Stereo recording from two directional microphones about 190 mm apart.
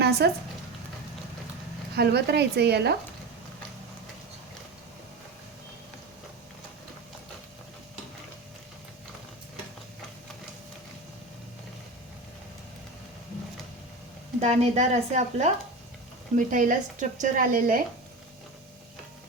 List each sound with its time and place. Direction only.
0.0 s a sound: 55° right (ahead or behind)
2.0 s speech: 60° right (ahead or behind)
14.3 s a woman's voice: 35° right (ahead or behind)